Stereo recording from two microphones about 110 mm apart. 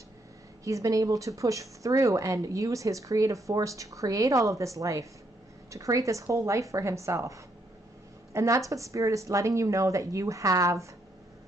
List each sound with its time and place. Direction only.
0.7 s speech: 30° right (ahead or behind)